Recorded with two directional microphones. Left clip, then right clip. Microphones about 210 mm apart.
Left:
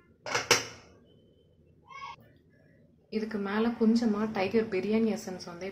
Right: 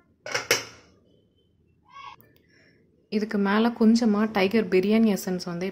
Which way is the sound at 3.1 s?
50° right (ahead or behind).